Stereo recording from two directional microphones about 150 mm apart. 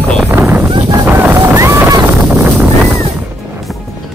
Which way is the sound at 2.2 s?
15° right (ahead or behind).